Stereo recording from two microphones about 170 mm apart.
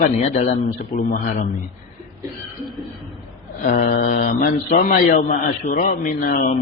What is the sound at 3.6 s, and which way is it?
A man's voice, 55° left (ahead or behind).